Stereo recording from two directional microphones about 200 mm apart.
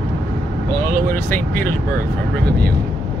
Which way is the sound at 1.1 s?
10° left (ahead or behind).